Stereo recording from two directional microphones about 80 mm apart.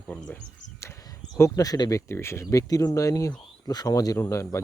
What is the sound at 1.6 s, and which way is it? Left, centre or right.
Speech, left.